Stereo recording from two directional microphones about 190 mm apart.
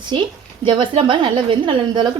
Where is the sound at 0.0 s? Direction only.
25° right (ahead or behind).